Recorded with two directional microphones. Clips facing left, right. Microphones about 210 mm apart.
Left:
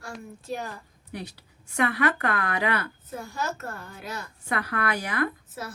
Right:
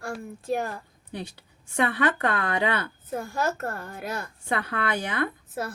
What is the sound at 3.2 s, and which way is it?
A child's voice, 55° right (ahead or behind).